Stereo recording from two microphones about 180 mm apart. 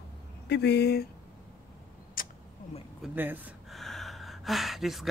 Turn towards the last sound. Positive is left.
turn(degrees=0)  # may be behind; listen again after turning